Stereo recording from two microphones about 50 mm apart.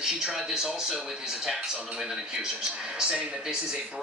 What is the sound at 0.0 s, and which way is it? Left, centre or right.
Speech, centre.